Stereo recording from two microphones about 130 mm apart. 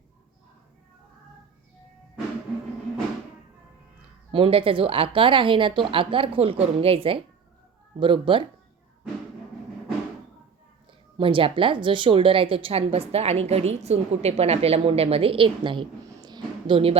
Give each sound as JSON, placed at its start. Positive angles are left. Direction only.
{"t": 4.3, "sound": "a woman's voice", "side_deg": -45}
{"t": 11.2, "sound": "a woman's voice", "side_deg": -45}
{"t": 16.0, "sound": "a sound", "side_deg": -35}